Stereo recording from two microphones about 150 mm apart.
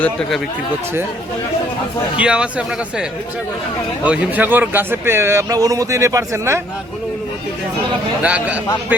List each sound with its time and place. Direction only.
0.0 s speech: 5° left (ahead or behind)
2.1 s a man's voice: 5° right (ahead or behind)
8.2 s a man's voice: 10° right (ahead or behind)